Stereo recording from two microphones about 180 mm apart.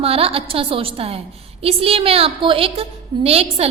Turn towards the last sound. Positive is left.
turn(degrees=-35)  # may be behind; listen again after turning